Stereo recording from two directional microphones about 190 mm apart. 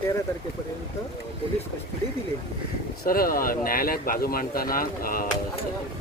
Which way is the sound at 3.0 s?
50° left (ahead or behind).